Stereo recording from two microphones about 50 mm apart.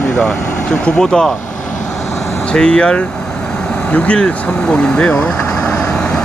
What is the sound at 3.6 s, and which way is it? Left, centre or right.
Vehicle, centre.